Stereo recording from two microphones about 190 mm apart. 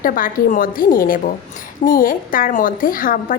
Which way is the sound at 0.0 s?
45° left (ahead or behind).